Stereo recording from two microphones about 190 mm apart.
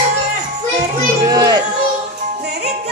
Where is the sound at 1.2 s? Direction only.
20° right (ahead or behind).